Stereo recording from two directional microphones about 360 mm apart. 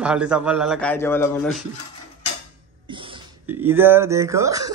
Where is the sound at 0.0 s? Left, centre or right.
Centre.